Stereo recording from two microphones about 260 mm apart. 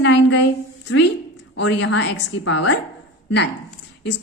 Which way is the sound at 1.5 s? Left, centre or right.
Left.